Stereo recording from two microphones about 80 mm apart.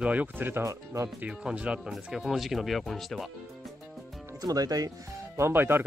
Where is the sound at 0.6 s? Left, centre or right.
Right.